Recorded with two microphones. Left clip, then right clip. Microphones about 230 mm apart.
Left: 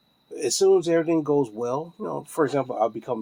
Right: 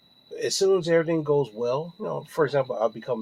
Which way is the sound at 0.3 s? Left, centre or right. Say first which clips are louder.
Left 3 dB; left.